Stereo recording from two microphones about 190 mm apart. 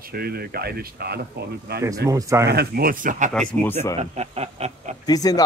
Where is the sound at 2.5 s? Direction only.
55° right (ahead or behind); by 4.9 s 35° right (ahead or behind).